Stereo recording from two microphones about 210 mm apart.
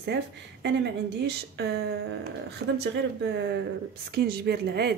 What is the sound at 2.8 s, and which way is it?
Speech, 55° right (ahead or behind).